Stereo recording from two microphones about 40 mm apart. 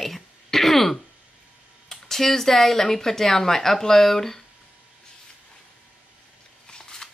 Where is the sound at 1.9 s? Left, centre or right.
Centre.